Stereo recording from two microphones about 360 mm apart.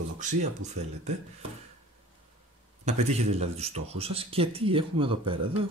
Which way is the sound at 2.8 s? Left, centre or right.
Centre.